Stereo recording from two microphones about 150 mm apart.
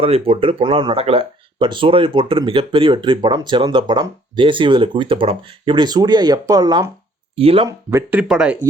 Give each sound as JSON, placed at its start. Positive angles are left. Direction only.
{"t": 0.0, "sound": "speech", "side_deg": -40}
{"t": 7.3, "sound": "speech", "side_deg": -40}
{"t": 7.7, "sound": "speech", "side_deg": -15}